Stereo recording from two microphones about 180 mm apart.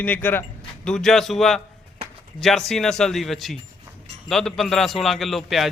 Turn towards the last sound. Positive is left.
turn(degrees=0)  # may be behind; listen again after turning